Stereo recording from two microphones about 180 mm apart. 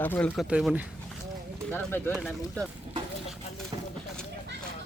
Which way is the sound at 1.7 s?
10° left (ahead or behind).